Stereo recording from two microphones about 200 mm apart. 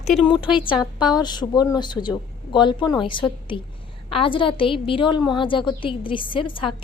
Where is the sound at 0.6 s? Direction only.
25° left (ahead or behind).